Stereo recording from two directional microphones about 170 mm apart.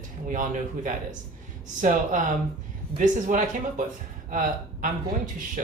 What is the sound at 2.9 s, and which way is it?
Speech, 45° right (ahead or behind).